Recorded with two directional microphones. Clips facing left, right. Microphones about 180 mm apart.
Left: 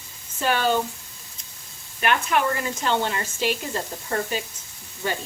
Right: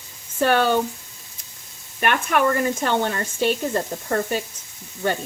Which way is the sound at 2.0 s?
55° right (ahead or behind).